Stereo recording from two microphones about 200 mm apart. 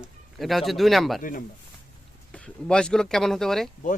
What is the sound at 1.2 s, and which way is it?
Speech, 45° left (ahead or behind).